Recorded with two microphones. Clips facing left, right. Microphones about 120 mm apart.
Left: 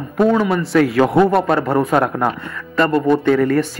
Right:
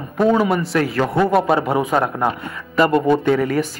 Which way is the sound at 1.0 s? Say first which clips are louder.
Left 4 dB; 25° left (ahead or behind).